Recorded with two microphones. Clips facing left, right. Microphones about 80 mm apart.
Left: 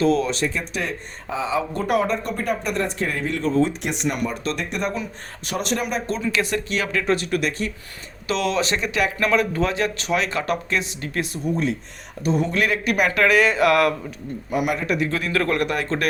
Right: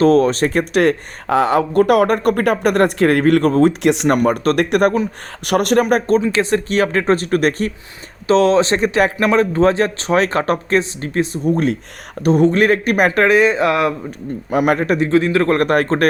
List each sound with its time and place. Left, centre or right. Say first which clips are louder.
0.0 s speech: right 8 dB; right
0.7 s speech: right 13 dB; right
3.8 s speech: right 10 dB; right
4.1 s speech: right 11 dB; right
5.9 s speech: right 11 dB; right
6.3 s speech: right 7 dB; right
8.3 s speech: right 10 dB; right
11.5 s speech: right 6 dB; right
13.2 s speech: right 1 dB; right
14.6 s speech: right 8 dB; right
14.9 s speech: right 8 dB; right
15.5 s speech: right 8 dB; right